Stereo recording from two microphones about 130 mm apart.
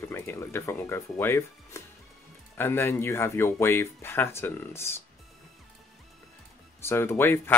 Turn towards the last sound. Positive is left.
turn(degrees=15)  # may be behind; listen again after turning